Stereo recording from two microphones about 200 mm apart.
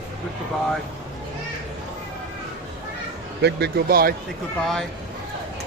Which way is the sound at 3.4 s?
50° right (ahead or behind).